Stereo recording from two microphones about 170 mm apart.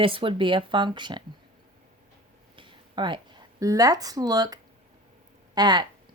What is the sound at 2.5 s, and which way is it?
Speech, 30° right (ahead or behind).